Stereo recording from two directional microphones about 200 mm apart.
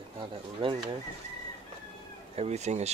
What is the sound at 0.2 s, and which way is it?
Speech, 25° right (ahead or behind).